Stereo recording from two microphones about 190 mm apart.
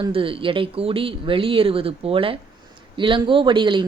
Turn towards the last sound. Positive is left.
turn(degrees=-25)  # may be behind; listen again after turning